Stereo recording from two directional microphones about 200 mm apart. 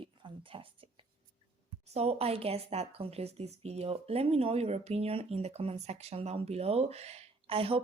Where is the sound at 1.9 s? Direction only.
30° right (ahead or behind).